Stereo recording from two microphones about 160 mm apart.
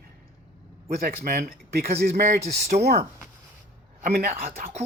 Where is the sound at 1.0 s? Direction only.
65° right (ahead or behind).